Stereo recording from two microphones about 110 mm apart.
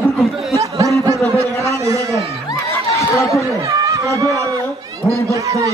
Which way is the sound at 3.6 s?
30° right (ahead or behind).